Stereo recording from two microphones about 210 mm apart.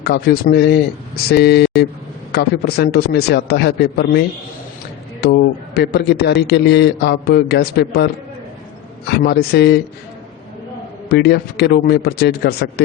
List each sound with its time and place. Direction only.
0.0 s a man's voice: 50° left (ahead or behind)
5.2 s a man's voice: 50° left (ahead or behind)
11.1 s a man's voice: 50° left (ahead or behind)